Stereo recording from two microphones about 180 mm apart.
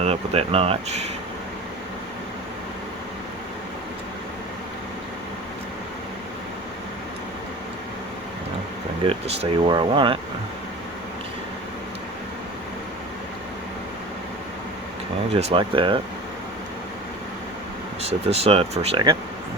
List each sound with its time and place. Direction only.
0.0 s speech: 35° right (ahead or behind)
9.0 s speech: 30° right (ahead or behind)
15.3 s speech: 35° right (ahead or behind)
18.0 s speech: 35° right (ahead or behind)